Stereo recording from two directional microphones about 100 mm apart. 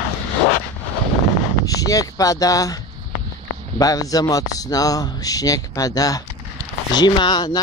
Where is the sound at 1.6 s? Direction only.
35° left (ahead or behind).